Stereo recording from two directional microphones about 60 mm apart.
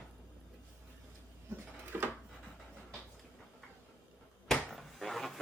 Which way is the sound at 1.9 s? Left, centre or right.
Right.